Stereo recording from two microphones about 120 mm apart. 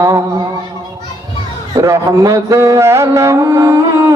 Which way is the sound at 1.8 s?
25° right (ahead or behind).